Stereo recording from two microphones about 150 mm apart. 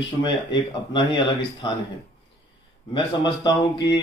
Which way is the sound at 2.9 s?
30° left (ahead or behind).